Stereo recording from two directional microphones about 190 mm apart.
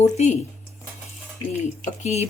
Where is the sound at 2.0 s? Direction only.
35° left (ahead or behind).